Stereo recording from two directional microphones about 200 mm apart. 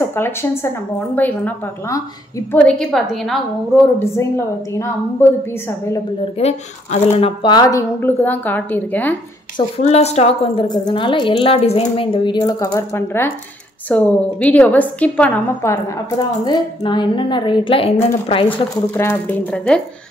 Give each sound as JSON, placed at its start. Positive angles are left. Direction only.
{"t": 0.0, "sound": "a woman's voice", "side_deg": 10}
{"t": 2.6, "sound": "a woman's voice", "side_deg": 5}
{"t": 4.7, "sound": "speech", "side_deg": 15}
{"t": 6.3, "sound": "speech", "side_deg": 30}
{"t": 9.8, "sound": "a woman's voice", "side_deg": 30}
{"t": 16.4, "sound": "a woman's voice", "side_deg": 25}
{"t": 18.9, "sound": "speech", "side_deg": 10}